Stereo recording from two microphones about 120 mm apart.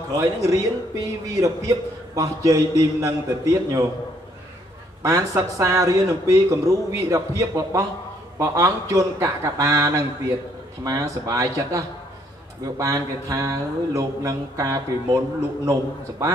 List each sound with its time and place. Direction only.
0.2 s a man's voice: 25° right (ahead or behind)
5.0 s a man's voice: 25° right (ahead or behind)